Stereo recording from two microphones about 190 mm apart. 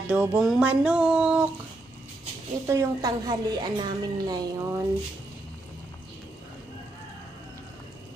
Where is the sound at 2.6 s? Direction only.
20° right (ahead or behind).